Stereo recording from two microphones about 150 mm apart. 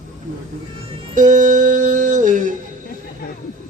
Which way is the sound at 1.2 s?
60° right (ahead or behind).